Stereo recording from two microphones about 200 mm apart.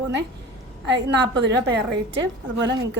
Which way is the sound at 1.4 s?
60° right (ahead or behind).